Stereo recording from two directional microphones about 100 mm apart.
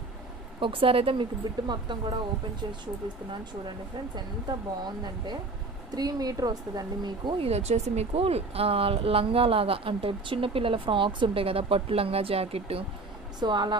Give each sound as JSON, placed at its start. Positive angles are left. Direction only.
{"t": 0.6, "sound": "speech", "side_deg": -60}
{"t": 1.4, "sound": "speech", "side_deg": -45}
{"t": 3.3, "sound": "speech", "side_deg": -50}
{"t": 7.3, "sound": "a woman's voice", "side_deg": -90}
{"t": 13.4, "sound": "speech", "side_deg": -50}